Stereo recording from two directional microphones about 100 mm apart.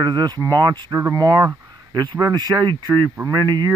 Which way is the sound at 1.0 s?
35° right (ahead or behind).